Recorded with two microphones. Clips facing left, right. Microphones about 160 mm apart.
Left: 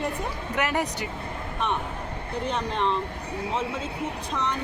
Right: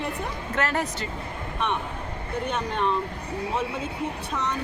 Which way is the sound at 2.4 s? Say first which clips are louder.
Even; 25° left (ahead or behind).